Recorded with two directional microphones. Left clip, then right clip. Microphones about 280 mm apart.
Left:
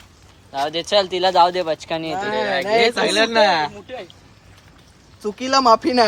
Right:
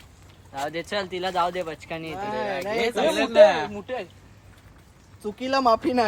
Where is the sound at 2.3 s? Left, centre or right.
Left.